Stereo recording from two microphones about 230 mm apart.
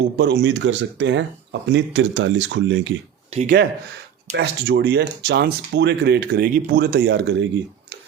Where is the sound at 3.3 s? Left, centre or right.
Right.